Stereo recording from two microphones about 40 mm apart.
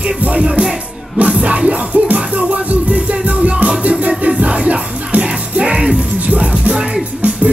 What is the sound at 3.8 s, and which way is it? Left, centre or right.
Music, right.